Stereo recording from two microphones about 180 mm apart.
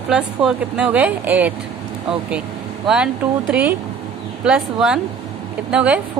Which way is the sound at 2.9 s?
5° right (ahead or behind).